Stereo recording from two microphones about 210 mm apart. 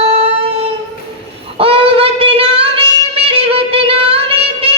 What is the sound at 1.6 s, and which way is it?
Child singing, 25° right (ahead or behind).